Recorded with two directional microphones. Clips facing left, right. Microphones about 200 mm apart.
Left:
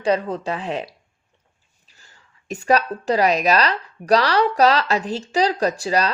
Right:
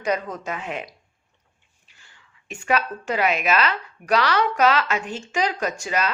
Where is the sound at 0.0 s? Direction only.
30° left (ahead or behind).